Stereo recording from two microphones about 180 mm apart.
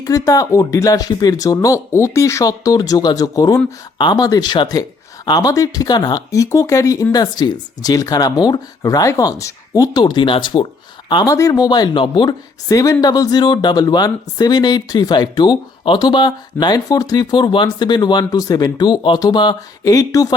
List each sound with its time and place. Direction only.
0.0 s speech: 20° left (ahead or behind)